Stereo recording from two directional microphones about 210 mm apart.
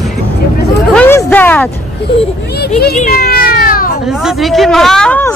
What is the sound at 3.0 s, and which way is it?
Cat, 45° left (ahead or behind).